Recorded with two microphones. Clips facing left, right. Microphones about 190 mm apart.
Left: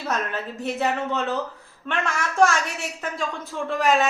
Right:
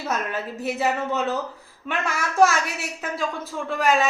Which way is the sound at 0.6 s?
5° right (ahead or behind).